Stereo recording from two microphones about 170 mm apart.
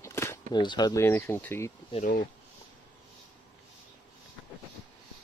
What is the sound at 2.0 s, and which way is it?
Speech, 55° left (ahead or behind).